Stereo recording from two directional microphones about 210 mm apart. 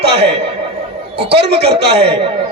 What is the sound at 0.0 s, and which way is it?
A man's voice, 55° right (ahead or behind).